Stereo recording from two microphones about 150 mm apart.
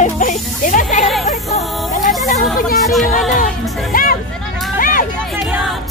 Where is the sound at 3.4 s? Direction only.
70° left (ahead or behind).